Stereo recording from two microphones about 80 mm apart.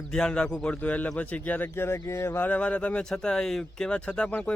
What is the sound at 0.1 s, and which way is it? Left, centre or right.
A man's voice, centre.